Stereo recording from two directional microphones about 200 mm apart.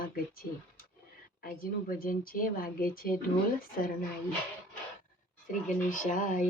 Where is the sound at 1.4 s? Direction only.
45° left (ahead or behind).